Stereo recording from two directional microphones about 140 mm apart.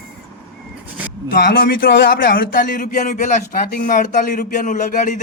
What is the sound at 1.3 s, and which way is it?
A man's voice, 90° left.